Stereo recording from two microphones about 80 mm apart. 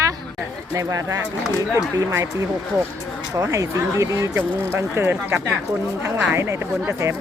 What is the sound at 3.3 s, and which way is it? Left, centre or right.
Speech, right.